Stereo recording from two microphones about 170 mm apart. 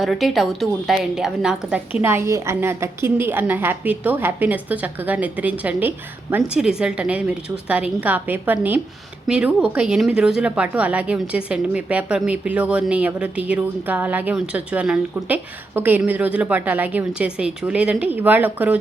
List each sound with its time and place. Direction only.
0.0 s a woman's voice: centre (ahead or behind)